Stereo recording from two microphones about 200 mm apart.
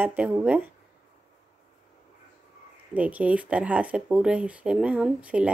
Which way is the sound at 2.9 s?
5° right (ahead or behind).